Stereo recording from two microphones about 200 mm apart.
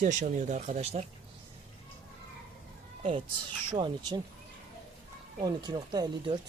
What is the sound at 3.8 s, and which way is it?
Speech, 25° right (ahead or behind).